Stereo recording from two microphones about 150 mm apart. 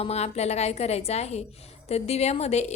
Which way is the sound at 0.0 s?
45° left (ahead or behind).